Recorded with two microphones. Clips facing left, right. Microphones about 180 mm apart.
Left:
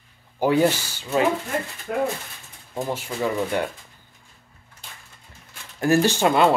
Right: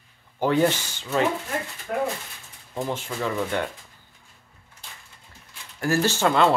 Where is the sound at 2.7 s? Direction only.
10° left (ahead or behind).